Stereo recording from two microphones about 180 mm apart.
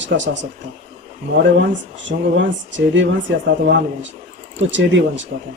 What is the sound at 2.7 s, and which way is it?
Speech, 90° right.